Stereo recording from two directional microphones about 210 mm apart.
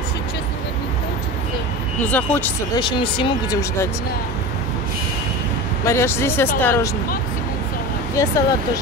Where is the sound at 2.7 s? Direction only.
20° left (ahead or behind).